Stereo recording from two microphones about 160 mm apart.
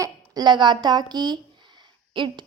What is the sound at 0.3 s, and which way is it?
A woman's voice, 30° right (ahead or behind).